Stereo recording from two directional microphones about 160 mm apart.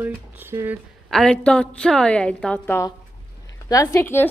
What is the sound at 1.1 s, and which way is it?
A woman's voice, 5° left (ahead or behind).